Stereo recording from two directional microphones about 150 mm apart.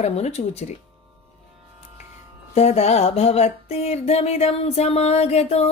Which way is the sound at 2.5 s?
45° left (ahead or behind).